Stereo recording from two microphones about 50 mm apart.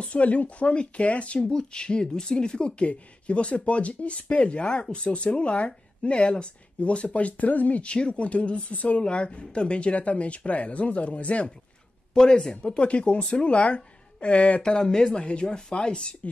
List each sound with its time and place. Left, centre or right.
0.0 s speech: left
12.1 s speech: centre